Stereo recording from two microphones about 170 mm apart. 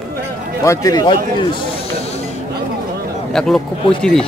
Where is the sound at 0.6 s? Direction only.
20° left (ahead or behind).